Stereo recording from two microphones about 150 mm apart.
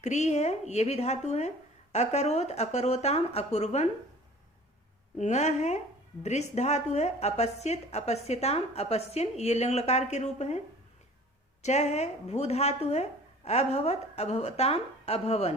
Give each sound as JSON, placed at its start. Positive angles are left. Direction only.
{"t": 0.0, "sound": "speech", "side_deg": 50}
{"t": 5.1, "sound": "speech", "side_deg": 50}
{"t": 11.6, "sound": "speech", "side_deg": 50}